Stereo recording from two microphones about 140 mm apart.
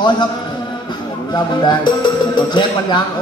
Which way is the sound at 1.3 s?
30° left (ahead or behind).